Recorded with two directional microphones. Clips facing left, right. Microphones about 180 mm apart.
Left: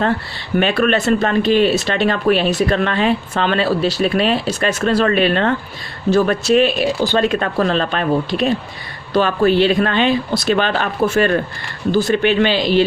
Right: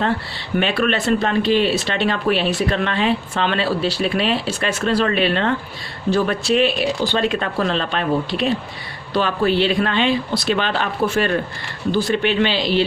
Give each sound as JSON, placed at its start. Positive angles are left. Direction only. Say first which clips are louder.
{"t": 0.5, "sound": "speech", "louder": "left 4 dB", "side_deg": 45}